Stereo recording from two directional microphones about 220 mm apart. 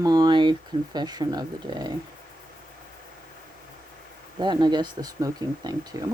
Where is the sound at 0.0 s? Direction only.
20° right (ahead or behind).